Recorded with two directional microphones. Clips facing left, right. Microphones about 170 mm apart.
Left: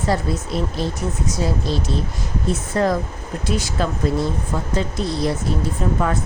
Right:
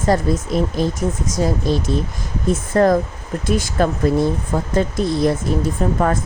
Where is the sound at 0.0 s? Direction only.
45° right (ahead or behind).